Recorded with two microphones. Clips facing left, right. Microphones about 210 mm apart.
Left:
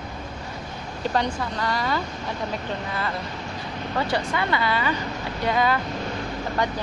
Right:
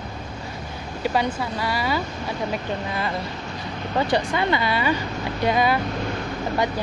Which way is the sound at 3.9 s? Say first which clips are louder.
Right 3 dB; 20° right (ahead or behind).